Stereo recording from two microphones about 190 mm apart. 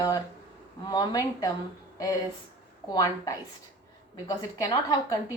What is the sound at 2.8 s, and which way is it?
Speech, 20° left (ahead or behind).